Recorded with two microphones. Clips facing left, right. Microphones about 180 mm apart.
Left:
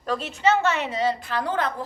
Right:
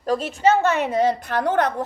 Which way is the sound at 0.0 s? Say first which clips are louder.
Right 4 dB; 40° right (ahead or behind).